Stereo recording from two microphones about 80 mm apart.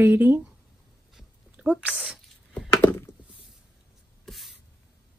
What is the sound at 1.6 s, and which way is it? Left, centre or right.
Speech, centre.